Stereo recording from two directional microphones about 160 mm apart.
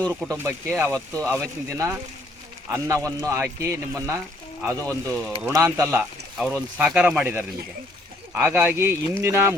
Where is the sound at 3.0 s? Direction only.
20° right (ahead or behind).